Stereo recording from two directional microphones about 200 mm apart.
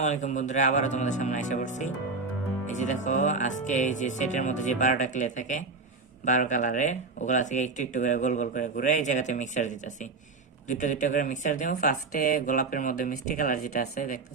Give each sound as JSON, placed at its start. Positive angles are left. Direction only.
{"t": 0.0, "sound": "speech", "side_deg": 35}